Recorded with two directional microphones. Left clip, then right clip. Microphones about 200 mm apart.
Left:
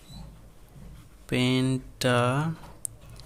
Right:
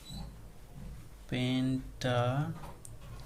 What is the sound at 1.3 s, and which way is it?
Speech, 45° left (ahead or behind).